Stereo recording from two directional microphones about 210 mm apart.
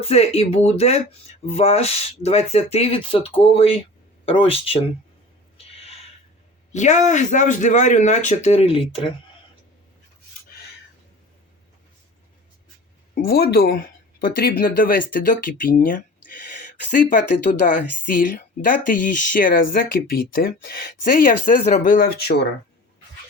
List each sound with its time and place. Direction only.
0.0 s speech: 30° left (ahead or behind)
5.5 s a sound: 30° left (ahead or behind)
6.7 s speech: 35° left (ahead or behind)
13.2 s speech: 45° left (ahead or behind)